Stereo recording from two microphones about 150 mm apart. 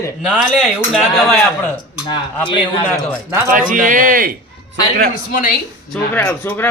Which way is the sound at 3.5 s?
65° right (ahead or behind).